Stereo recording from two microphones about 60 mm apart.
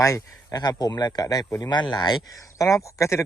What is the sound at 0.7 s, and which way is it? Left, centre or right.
Speech, left.